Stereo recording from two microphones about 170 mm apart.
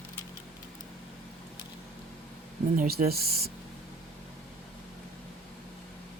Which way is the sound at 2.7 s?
65° right (ahead or behind).